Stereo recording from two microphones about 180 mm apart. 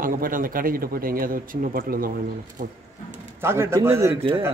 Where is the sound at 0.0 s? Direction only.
50° right (ahead or behind).